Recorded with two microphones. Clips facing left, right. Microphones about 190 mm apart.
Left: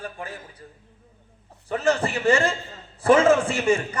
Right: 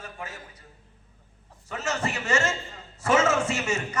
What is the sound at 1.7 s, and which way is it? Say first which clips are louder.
Speech: left 7 dB; 30° left (ahead or behind).